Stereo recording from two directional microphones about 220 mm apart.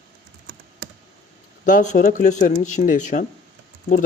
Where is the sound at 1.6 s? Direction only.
35° left (ahead or behind).